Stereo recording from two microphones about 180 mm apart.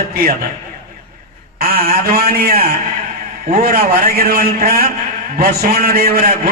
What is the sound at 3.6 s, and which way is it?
A man's voice, 60° right (ahead or behind).